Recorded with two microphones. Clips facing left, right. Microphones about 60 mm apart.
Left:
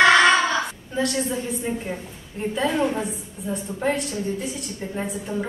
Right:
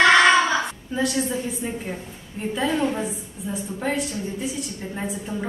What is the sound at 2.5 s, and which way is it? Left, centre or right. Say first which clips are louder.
A woman's voice: even; centre.